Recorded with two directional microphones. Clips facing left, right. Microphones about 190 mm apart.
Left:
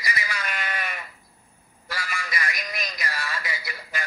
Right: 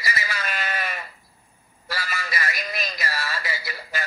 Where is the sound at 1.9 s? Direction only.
30° right (ahead or behind).